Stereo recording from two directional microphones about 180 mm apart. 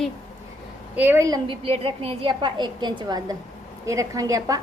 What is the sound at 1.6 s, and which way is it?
A woman's voice, 30° right (ahead or behind).